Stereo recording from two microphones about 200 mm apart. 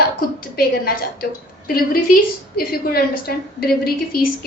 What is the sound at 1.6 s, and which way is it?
A woman's voice, 45° left (ahead or behind).